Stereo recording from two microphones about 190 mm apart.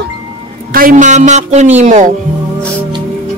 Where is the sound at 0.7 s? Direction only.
50° right (ahead or behind).